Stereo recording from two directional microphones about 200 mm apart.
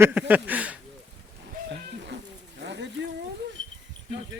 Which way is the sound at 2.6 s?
60° right (ahead or behind).